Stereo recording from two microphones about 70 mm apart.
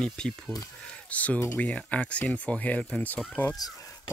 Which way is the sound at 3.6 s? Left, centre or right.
Left.